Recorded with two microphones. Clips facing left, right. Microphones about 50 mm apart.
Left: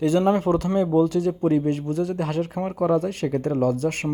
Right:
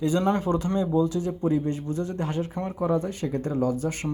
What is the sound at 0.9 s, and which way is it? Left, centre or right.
A man's voice, left.